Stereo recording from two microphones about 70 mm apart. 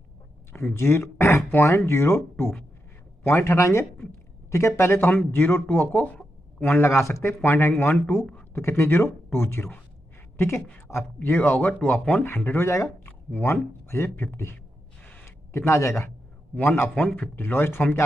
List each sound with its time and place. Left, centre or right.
0.7 s a man's voice: left
5.9 s a sound: left
6.9 s a man's voice: left
10.9 s a man's voice: centre
11.3 s speech: left
12.4 s speech: left
13.3 s a man's voice: left
16.5 s speech: left